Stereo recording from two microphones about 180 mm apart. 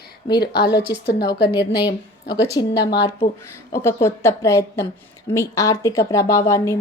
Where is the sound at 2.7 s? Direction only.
75° left (ahead or behind).